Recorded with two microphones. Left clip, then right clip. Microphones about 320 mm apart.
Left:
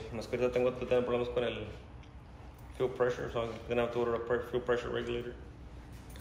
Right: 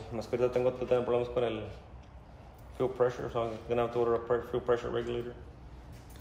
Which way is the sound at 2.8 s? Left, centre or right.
Right.